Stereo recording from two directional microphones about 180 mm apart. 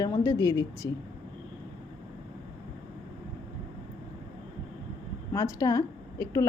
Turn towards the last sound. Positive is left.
turn(degrees=20)  # may be behind; listen again after turning